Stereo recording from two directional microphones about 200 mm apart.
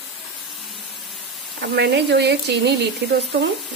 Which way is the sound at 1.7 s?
55° right (ahead or behind).